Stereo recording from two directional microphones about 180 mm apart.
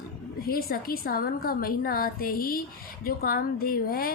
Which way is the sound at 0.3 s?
55° left (ahead or behind).